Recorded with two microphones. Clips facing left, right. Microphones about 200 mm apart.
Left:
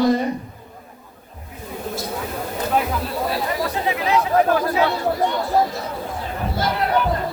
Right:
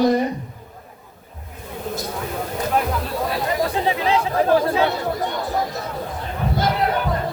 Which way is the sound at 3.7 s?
30° right (ahead or behind).